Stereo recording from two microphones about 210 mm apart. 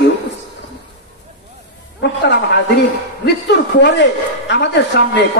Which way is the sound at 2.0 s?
55° left (ahead or behind).